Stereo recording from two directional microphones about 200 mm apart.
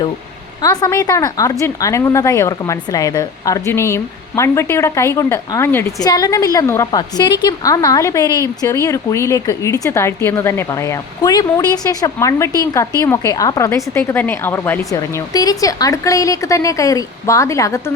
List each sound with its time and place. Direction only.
0.6 s a woman's voice: 20° left (ahead or behind)